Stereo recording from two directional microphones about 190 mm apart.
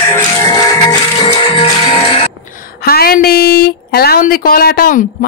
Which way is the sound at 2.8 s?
55° left (ahead or behind).